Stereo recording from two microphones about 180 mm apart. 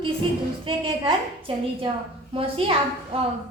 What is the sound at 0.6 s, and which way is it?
Speech, 30° right (ahead or behind).